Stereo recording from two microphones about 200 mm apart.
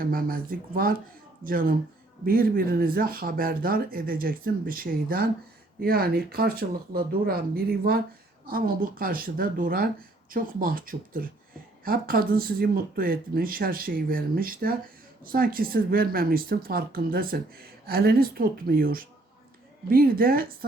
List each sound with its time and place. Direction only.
0.0 s speech: 45° right (ahead or behind)